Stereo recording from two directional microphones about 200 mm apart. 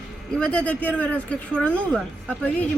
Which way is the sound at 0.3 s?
5° left (ahead or behind).